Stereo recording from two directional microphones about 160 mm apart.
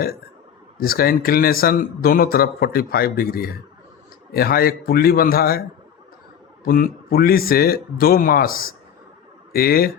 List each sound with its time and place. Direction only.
0.8 s speech: 65° left (ahead or behind)
6.7 s speech: 65° left (ahead or behind)